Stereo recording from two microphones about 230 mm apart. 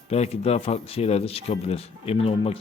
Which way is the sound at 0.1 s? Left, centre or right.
Left.